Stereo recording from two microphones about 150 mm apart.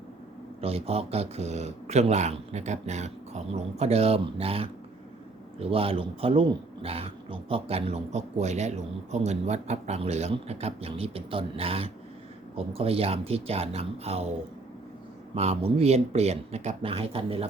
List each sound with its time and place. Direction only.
0.6 s speech: 40° right (ahead or behind)
15.4 s speech: 45° right (ahead or behind)